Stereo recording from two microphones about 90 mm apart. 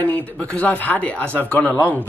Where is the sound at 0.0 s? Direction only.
15° left (ahead or behind).